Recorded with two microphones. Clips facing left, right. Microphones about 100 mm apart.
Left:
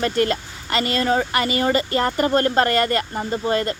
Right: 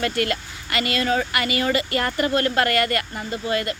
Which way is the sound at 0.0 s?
30° left (ahead or behind).